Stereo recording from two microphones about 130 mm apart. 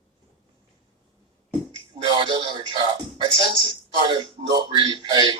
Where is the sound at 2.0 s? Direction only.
40° right (ahead or behind).